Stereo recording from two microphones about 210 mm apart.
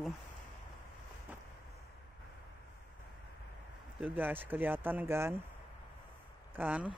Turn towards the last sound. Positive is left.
turn(degrees=-5)  # may be behind; listen again after turning